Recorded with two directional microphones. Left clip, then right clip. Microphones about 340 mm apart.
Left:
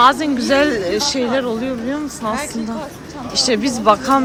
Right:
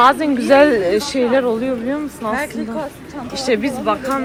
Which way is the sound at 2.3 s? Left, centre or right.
Right.